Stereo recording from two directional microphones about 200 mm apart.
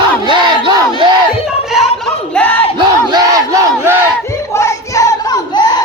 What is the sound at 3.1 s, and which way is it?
Crowd, 20° right (ahead or behind).